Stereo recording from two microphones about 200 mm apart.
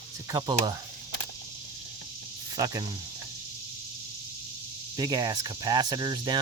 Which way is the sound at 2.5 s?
20° right (ahead or behind).